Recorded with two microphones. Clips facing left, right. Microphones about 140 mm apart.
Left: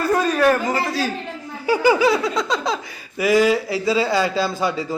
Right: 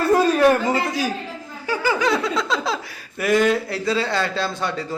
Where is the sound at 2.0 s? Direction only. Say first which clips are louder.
Left 2 dB; centre (ahead or behind).